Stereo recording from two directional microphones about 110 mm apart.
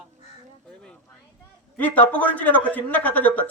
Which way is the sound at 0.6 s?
10° left (ahead or behind).